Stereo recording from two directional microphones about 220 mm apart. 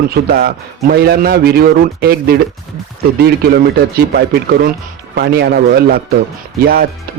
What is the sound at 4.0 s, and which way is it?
A man's voice, 45° right (ahead or behind).